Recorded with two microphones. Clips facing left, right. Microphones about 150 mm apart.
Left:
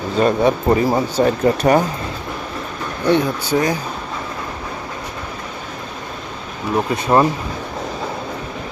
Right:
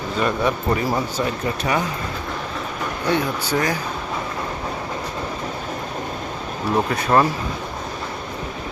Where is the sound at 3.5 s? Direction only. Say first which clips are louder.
Left 4 dB; 15° left (ahead or behind).